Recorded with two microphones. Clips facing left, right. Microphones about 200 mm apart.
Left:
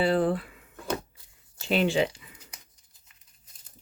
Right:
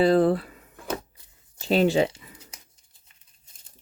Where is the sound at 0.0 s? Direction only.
40° right (ahead or behind).